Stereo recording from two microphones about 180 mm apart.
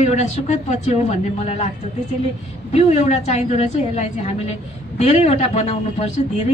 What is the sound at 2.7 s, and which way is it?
A woman's voice, 40° left (ahead or behind).